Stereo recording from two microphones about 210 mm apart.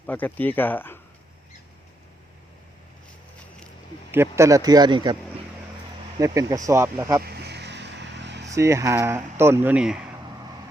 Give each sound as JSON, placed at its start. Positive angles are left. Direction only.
{"t": 0.0, "sound": "speech", "side_deg": 10}
{"t": 4.1, "sound": "a man's voice", "side_deg": -10}
{"t": 6.1, "sound": "speech", "side_deg": -15}
{"t": 7.3, "sound": "vehicle", "side_deg": -50}
{"t": 8.5, "sound": "speech", "side_deg": -15}